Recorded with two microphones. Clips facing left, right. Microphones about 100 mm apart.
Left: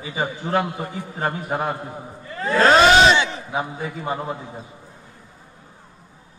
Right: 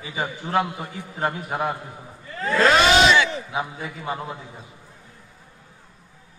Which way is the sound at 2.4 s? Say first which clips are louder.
Left 3 dB; 35° left (ahead or behind).